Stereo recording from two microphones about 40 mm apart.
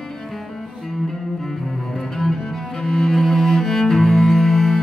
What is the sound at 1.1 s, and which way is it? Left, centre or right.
Cello, centre.